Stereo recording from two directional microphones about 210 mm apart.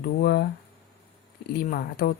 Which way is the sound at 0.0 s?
50° left (ahead or behind).